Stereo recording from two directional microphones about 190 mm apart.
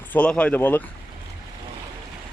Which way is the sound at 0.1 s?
5° left (ahead or behind).